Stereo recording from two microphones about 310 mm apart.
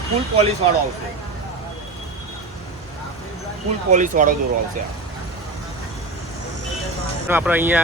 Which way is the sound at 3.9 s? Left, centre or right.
Right.